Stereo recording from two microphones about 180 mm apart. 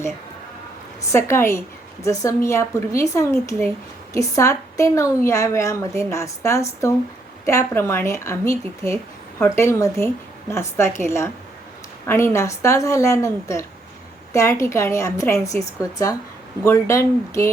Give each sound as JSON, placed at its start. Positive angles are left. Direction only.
{"t": 1.1, "sound": "a woman's voice", "side_deg": 15}